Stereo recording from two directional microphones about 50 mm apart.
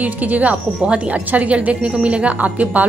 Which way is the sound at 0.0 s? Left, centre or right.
Right.